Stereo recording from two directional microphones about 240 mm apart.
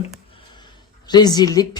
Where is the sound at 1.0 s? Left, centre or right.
Centre.